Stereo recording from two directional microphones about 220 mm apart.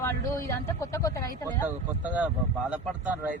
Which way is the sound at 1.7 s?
5° right (ahead or behind).